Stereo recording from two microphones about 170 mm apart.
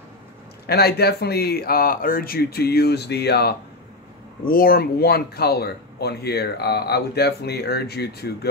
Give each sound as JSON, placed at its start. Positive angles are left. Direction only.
{"t": 0.7, "sound": "speech", "side_deg": 70}
{"t": 4.5, "sound": "speech", "side_deg": 60}